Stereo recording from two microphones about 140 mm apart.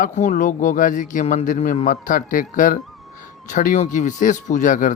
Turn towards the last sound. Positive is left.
turn(degrees=65)  # may be behind; listen again after turning